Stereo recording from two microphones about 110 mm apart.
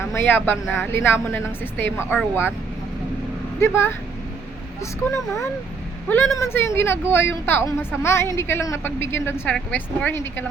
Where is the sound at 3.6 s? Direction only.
25° left (ahead or behind).